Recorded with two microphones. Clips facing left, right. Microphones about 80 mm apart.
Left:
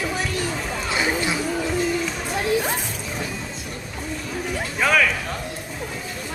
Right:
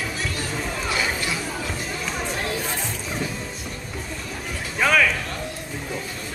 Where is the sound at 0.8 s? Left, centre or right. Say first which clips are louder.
Left 4 dB; left.